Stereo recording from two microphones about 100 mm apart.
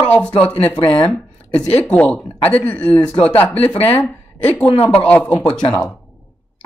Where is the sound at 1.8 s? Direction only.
15° left (ahead or behind).